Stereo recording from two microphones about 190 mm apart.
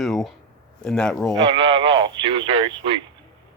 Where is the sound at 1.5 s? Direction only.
25° right (ahead or behind).